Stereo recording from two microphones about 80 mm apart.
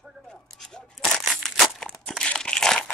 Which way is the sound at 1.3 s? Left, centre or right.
Centre.